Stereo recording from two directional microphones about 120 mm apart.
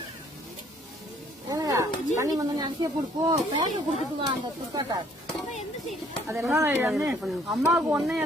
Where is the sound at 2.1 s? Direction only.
30° right (ahead or behind).